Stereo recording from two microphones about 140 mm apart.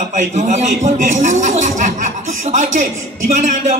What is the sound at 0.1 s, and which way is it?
A man's voice, 60° right (ahead or behind).